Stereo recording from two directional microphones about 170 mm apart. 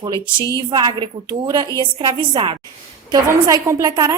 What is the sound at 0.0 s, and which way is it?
A woman's voice, 25° right (ahead or behind).